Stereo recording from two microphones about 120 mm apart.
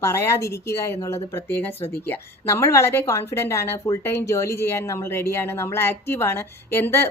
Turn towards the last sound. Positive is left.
turn(degrees=20)  # may be behind; listen again after turning